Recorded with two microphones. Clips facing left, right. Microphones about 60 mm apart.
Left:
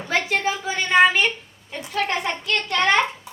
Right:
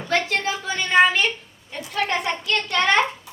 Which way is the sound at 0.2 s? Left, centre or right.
Centre.